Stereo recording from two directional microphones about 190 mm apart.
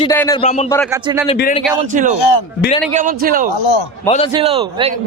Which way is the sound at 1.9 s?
40° right (ahead or behind).